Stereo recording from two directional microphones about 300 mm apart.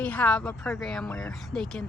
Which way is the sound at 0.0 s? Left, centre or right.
Centre.